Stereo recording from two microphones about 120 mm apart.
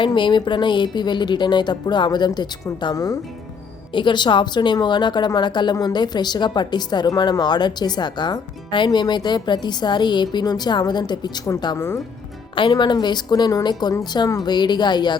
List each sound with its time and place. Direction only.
0.0 s speech: 40° left (ahead or behind)
3.9 s speech: 40° left (ahead or behind)